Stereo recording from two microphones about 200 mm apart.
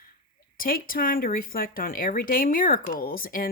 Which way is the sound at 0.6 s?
45° left (ahead or behind).